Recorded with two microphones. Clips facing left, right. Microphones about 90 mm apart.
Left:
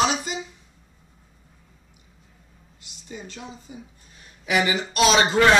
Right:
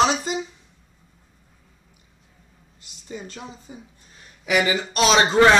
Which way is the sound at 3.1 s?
40° right (ahead or behind).